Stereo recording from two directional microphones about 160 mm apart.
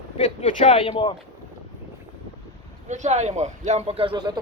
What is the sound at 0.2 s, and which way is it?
Speech, 45° left (ahead or behind).